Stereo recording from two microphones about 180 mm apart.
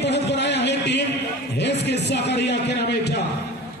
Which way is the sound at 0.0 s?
70° left (ahead or behind).